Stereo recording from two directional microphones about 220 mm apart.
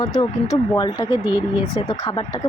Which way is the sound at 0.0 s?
15° left (ahead or behind).